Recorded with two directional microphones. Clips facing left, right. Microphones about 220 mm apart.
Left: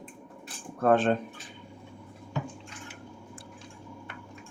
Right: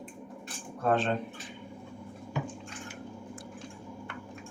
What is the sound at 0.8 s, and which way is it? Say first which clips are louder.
Speech: left 5 dB; 50° left (ahead or behind).